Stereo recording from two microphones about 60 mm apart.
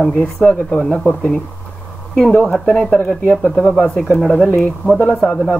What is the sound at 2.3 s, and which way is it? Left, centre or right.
Speech, left.